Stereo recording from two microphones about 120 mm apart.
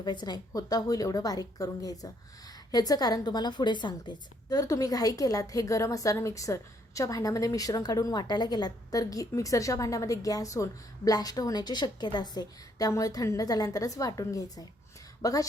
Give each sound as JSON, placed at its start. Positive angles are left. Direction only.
{"t": 0.0, "sound": "a woman's voice", "side_deg": 35}